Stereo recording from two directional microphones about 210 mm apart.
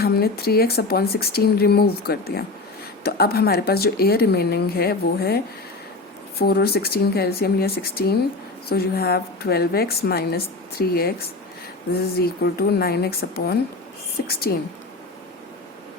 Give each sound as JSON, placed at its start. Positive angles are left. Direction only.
{"t": 0.0, "sound": "a woman's voice", "side_deg": 45}
{"t": 6.4, "sound": "a woman's voice", "side_deg": 50}
{"t": 12.2, "sound": "a woman's voice", "side_deg": 45}